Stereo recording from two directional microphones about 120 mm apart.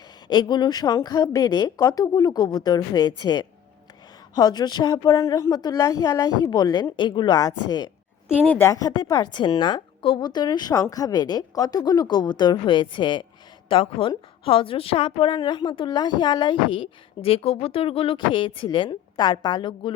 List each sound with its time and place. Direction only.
0.3 s a woman's voice: 40° left (ahead or behind)